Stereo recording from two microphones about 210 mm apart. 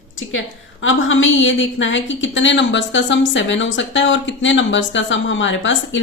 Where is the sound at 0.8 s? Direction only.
65° left (ahead or behind).